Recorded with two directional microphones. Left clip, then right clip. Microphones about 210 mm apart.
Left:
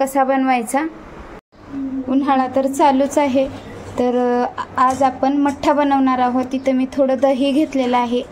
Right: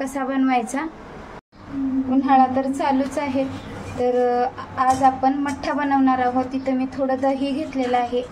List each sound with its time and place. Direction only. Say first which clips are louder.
0.0 s a woman's voice: left 7 dB; 25° left (ahead or behind)
2.2 s a woman's voice: right 1 dB; 45° left (ahead or behind)